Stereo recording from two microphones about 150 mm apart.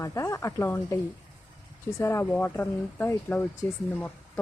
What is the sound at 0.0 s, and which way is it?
Speech, 20° left (ahead or behind).